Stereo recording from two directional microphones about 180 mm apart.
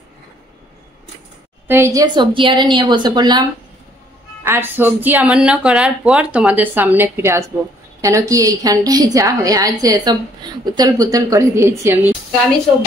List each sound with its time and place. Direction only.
1.7 s a woman's voice: 15° right (ahead or behind)
4.4 s a woman's voice: 10° right (ahead or behind)